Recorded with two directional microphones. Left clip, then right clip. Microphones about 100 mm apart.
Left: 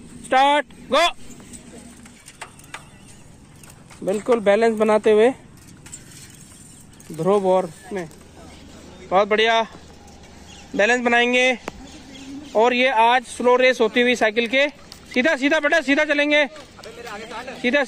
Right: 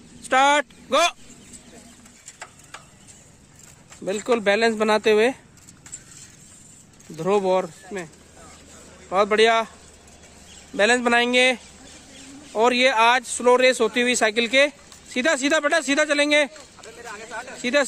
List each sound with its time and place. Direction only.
0.3 s speech: 20° right (ahead or behind)
2.3 s a sound: 25° left (ahead or behind)
4.2 s speech: 30° right (ahead or behind)
7.2 s speech: 35° right (ahead or behind)
9.1 s speech: 20° right (ahead or behind)
10.8 s speech: 15° right (ahead or behind)